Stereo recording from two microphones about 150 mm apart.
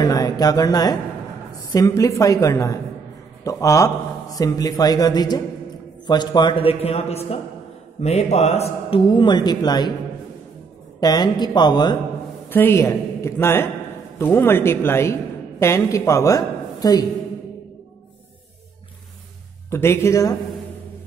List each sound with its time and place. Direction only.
0.0 s a man's voice: 25° left (ahead or behind); by 9.0 s 45° left (ahead or behind)
9.1 s a man's voice: 30° left (ahead or behind)
11.0 s a man's voice: 25° left (ahead or behind)
12.4 s a man's voice: 15° left (ahead or behind)
19.7 s a man's voice: 15° left (ahead or behind)